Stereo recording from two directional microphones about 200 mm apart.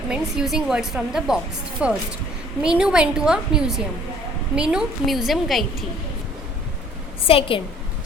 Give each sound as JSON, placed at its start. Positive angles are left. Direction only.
{"t": 0.1, "sound": "speech", "side_deg": -5}
{"t": 7.3, "sound": "a woman's voice", "side_deg": 25}